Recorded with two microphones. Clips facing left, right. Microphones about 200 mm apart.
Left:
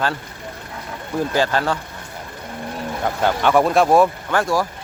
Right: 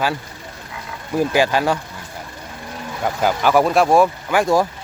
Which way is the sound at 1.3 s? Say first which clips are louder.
Right 2 dB; 10° right (ahead or behind).